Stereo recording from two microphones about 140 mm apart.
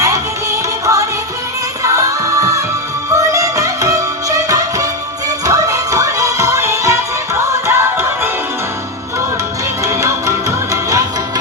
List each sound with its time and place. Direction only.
0.0 s music: 20° right (ahead or behind)
9.8 s music: 20° right (ahead or behind)